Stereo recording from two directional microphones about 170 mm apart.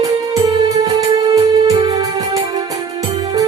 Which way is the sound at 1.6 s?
30° right (ahead or behind).